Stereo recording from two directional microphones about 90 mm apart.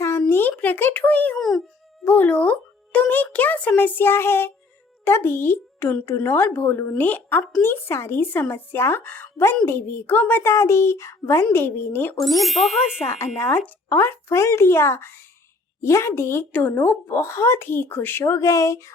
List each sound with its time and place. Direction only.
0.3 s a sound: 25° left (ahead or behind)
1.4 s a child's voice: centre (ahead or behind)
2.0 s music: 20° left (ahead or behind)
5.0 s speech: 25° left (ahead or behind)
10.5 s a child's voice: 30° left (ahead or behind)
12.2 s speech: centre (ahead or behind)
13.1 s a child's voice: 30° left (ahead or behind)
16.5 s speech: 15° left (ahead or behind); by 18.9 s 35° left (ahead or behind)